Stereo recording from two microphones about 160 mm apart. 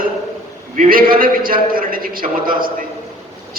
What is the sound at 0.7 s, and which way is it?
A man's voice, 60° right (ahead or behind).